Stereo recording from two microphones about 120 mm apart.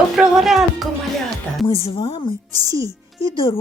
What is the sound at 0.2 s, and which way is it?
Speech, 5° right (ahead or behind).